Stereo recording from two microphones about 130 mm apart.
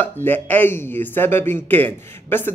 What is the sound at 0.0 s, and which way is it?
Speech, 15° left (ahead or behind).